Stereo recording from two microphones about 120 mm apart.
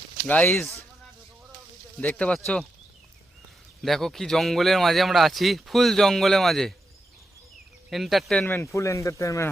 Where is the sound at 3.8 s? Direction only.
Centre (ahead or behind).